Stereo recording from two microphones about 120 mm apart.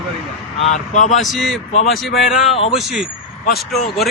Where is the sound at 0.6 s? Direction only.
85° left.